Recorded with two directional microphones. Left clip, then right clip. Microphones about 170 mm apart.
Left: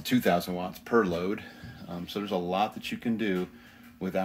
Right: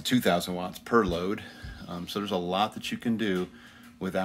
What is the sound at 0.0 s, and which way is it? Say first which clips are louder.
Speech: even; centre (ahead or behind).